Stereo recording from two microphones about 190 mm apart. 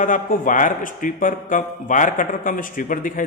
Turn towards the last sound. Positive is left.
turn(degrees=45)  # may be behind; listen again after turning